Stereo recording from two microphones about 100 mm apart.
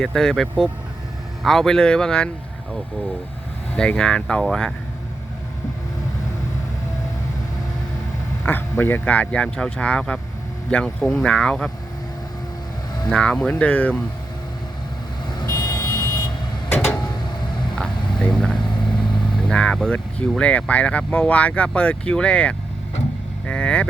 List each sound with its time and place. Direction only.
0.0 s speech: 5° left (ahead or behind)
3.8 s speech: 5° left (ahead or behind)
8.4 s speech: 20° left (ahead or behind)
13.1 s speech: 10° left (ahead or behind)
15.4 s vehicle: 40° left (ahead or behind)
16.6 s a sound: 20° left (ahead or behind)
18.2 s vehicle: 5° left (ahead or behind)
18.5 s vehicle: 50° left (ahead or behind)
19.4 s speech: 10° left (ahead or behind)